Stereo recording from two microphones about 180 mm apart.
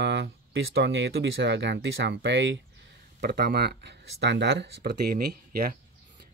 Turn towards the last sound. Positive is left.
turn(degrees=-55)  # may be behind; listen again after turning